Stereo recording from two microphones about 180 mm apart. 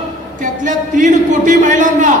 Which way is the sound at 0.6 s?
45° right (ahead or behind).